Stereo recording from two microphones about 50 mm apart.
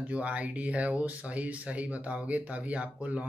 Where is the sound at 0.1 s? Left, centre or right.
Right.